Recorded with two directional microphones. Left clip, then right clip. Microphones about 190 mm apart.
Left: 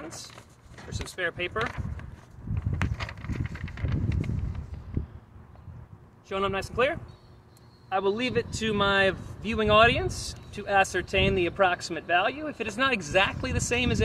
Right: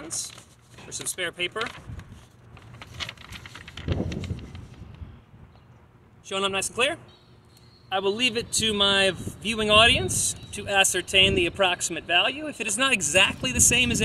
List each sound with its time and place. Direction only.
1.1 s speech: 20° right (ahead or behind)
3.0 s a sound: centre (ahead or behind)
6.2 s speech: 20° right (ahead or behind)